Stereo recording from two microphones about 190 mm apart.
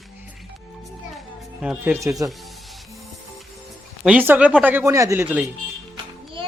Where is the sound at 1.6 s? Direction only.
10° right (ahead or behind).